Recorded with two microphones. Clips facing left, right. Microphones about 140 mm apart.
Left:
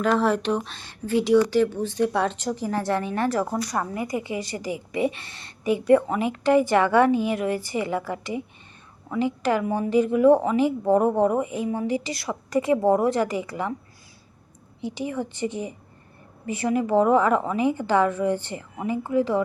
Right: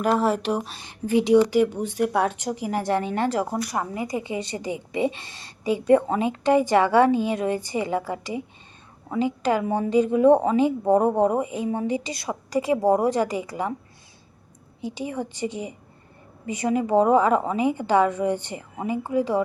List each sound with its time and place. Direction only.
0.7 s a woman's voice: 15° right (ahead or behind)
14.8 s a woman's voice: 15° right (ahead or behind)